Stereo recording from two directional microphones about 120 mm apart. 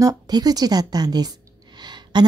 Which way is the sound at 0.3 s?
30° right (ahead or behind).